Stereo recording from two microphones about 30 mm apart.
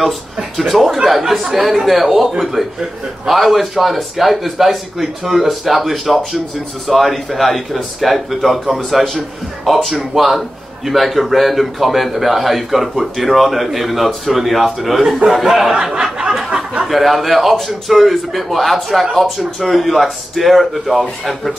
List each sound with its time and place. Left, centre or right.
0.6 s a man's voice: centre
3.3 s a man's voice: centre
15.8 s a sound: right
16.8 s a man's voice: centre